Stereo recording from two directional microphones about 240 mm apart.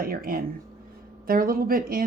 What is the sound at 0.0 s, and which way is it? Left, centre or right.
Speech, right.